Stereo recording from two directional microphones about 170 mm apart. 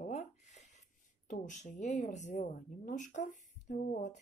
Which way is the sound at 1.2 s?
45° left (ahead or behind).